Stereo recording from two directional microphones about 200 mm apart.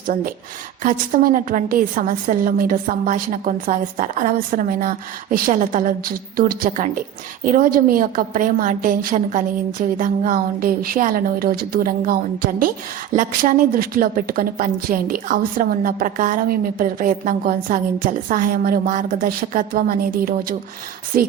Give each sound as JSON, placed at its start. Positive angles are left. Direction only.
{"t": 0.8, "sound": "a woman's voice", "side_deg": -40}